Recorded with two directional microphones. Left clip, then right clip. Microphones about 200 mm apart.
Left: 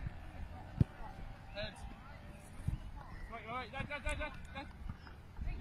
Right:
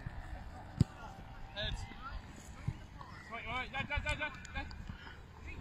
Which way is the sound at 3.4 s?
40° right (ahead or behind).